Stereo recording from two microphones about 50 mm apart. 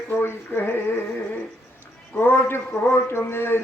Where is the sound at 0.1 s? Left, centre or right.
Left.